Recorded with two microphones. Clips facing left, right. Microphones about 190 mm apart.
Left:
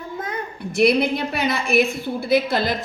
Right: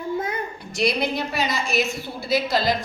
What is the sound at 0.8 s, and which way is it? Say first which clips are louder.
A woman's voice: left 5 dB; 55° left (ahead or behind).